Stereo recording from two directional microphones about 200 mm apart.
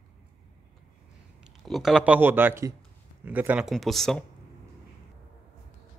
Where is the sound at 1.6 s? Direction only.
Centre (ahead or behind).